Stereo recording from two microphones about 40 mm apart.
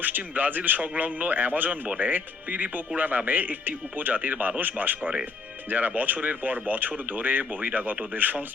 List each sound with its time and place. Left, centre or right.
0.3 s speech: right